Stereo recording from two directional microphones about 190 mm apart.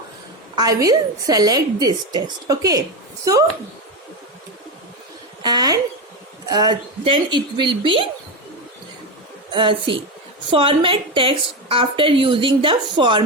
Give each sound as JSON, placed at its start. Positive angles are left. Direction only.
{"t": 0.5, "sound": "a woman's voice", "side_deg": -20}
{"t": 5.4, "sound": "a sound", "side_deg": -20}
{"t": 6.4, "sound": "a woman's voice", "side_deg": -20}
{"t": 9.5, "sound": "a woman's voice", "side_deg": -25}